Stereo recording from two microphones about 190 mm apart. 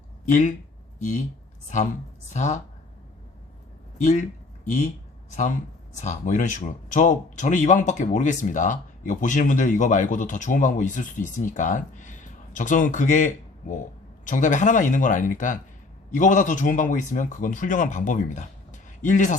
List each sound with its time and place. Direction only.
0.3 s speech: 40° left (ahead or behind)
2.3 s speech: 40° left (ahead or behind)
3.9 s speech: 40° left (ahead or behind)
6.0 s a man's voice: 40° left (ahead or behind)